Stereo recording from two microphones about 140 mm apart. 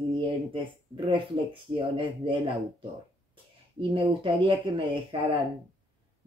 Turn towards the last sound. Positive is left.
turn(degrees=-35)  # may be behind; listen again after turning